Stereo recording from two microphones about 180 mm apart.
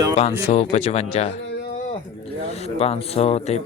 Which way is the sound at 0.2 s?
35° left (ahead or behind).